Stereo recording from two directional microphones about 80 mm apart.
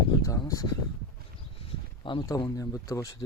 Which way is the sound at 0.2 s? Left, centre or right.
Left.